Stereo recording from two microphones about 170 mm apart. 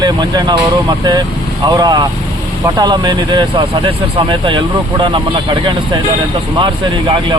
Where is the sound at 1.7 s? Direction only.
25° right (ahead or behind).